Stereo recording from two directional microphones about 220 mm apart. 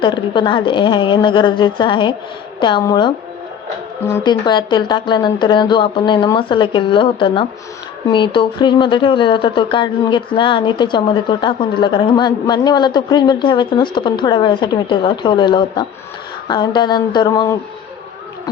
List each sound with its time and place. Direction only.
0.0 s speech: 20° left (ahead or behind)